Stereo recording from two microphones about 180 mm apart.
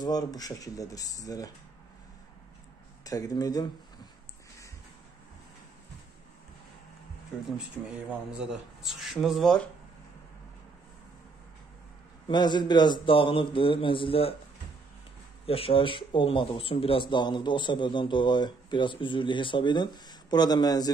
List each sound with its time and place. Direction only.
0.0 s speech: 20° left (ahead or behind)
3.0 s speech: 20° left (ahead or behind)
8.4 s speech: 5° right (ahead or behind)
12.3 s speech: 25° left (ahead or behind)
15.4 s speech: 30° left (ahead or behind)